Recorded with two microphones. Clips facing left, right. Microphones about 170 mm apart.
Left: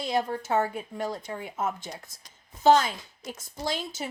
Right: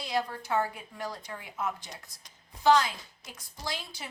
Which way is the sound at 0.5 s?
25° left (ahead or behind).